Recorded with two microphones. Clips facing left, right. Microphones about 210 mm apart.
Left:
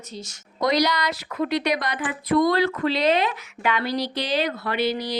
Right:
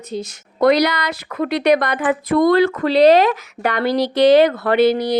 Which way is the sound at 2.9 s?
40° right (ahead or behind).